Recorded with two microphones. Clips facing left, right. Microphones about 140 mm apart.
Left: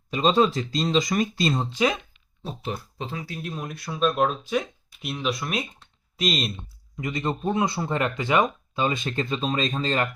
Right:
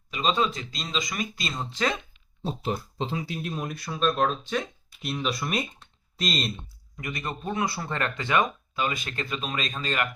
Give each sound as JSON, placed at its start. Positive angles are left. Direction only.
{"t": 0.1, "sound": "speech", "side_deg": 35}
{"t": 1.7, "sound": "speech", "side_deg": 10}
{"t": 2.4, "sound": "speech", "side_deg": -30}
{"t": 3.3, "sound": "speech", "side_deg": -5}
{"t": 6.9, "sound": "speech", "side_deg": 20}